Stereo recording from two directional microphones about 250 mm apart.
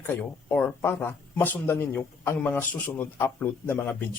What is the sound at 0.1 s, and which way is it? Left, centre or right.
Speech, centre.